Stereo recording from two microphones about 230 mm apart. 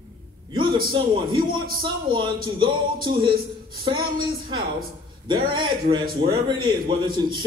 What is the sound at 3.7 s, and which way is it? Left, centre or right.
A man's voice, right.